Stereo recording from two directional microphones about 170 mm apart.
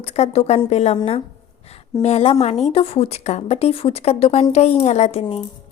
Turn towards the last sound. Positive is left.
turn(degrees=40)  # may be behind; listen again after turning